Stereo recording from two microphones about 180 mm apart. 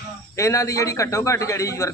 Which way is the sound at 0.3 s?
15° left (ahead or behind).